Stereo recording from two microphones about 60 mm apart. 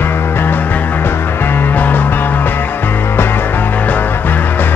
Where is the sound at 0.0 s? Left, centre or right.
Left.